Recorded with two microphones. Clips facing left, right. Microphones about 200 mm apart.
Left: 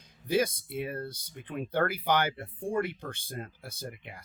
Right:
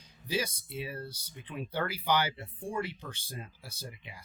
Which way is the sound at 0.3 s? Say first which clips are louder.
Left 6 dB; 55° left (ahead or behind).